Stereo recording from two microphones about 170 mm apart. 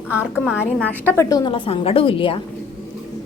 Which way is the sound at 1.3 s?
25° left (ahead or behind).